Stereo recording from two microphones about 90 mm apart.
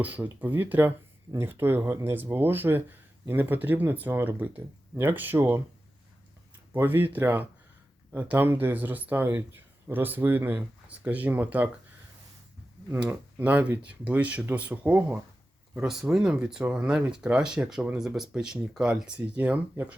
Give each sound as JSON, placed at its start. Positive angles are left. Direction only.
{"t": 0.0, "sound": "speech", "side_deg": -20}
{"t": 6.7, "sound": "speech", "side_deg": -25}
{"t": 13.0, "sound": "speech", "side_deg": -15}
{"t": 15.7, "sound": "speech", "side_deg": -5}